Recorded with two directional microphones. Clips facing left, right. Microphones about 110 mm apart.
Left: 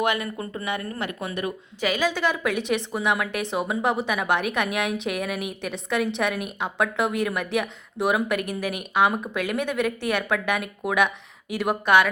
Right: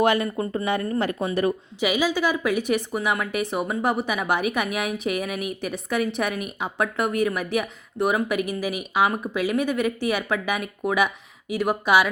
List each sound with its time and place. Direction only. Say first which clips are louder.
0.0 s speech: right 4 dB; 35° right (ahead or behind)
1.8 s a woman's voice: right 1 dB; 10° right (ahead or behind)